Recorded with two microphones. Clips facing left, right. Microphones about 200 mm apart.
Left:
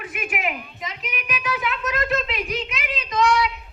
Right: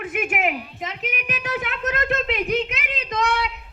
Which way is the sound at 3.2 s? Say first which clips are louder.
Left 4 dB; 60° right (ahead or behind).